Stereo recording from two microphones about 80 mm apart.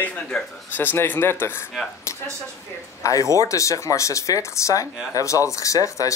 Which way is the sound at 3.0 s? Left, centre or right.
Left.